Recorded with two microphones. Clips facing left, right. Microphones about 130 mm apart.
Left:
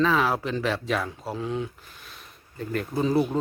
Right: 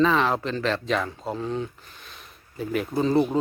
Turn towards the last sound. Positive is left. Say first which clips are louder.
# right 2 dB
turn(degrees=5)  # may be behind; listen again after turning